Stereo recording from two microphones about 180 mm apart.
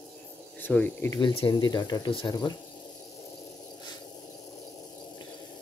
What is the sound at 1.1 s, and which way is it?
Speech, 25° left (ahead or behind).